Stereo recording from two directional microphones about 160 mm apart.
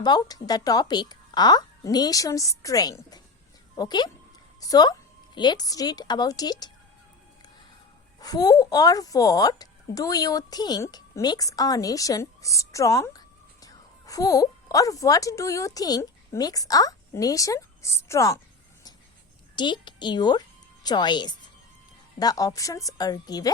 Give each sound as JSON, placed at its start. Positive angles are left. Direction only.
{"t": 0.0, "sound": "a woman's voice", "side_deg": 25}
{"t": 8.2, "sound": "a woman's voice", "side_deg": 25}
{"t": 19.5, "sound": "a woman's voice", "side_deg": 30}